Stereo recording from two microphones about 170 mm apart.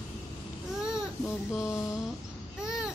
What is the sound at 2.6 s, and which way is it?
Babbling, 5° right (ahead or behind).